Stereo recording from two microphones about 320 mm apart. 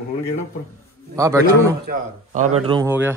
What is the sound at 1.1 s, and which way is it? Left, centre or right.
Speech, centre.